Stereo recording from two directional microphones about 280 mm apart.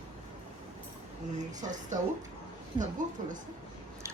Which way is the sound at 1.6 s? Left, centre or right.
Right.